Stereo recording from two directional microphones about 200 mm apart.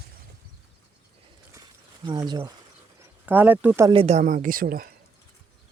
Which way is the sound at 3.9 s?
30° right (ahead or behind).